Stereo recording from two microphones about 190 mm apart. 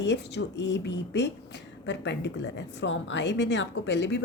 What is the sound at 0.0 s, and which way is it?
Speech, 65° left (ahead or behind).